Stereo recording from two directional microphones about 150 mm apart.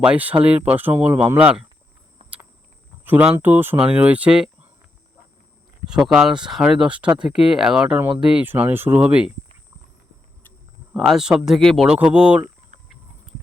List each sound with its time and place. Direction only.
0.0 s speech: 10° right (ahead or behind)
3.0 s speech: 10° right (ahead or behind)
5.8 s speech: 5° right (ahead or behind)
10.9 s speech: centre (ahead or behind)